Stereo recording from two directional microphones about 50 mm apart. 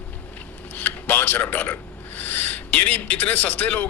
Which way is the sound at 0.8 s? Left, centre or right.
Left.